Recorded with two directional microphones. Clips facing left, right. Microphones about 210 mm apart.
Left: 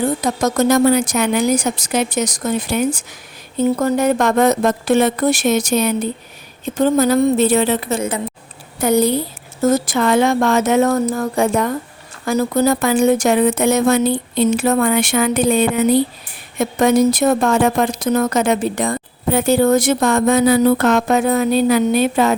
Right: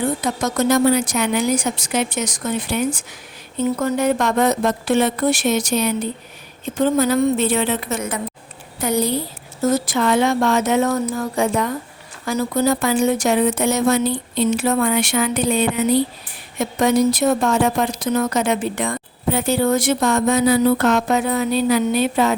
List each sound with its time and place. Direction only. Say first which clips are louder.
0.2 s a woman's voice: left 4 dB; 40° left (ahead or behind)
8.8 s speech: left 5 dB; 50° left (ahead or behind)